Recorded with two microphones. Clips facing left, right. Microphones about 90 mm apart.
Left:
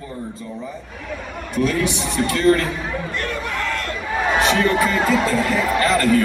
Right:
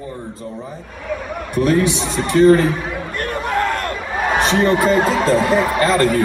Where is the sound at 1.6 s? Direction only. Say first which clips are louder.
Right 4 dB; 30° right (ahead or behind).